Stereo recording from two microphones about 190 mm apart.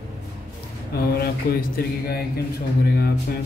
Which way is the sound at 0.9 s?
55° left (ahead or behind).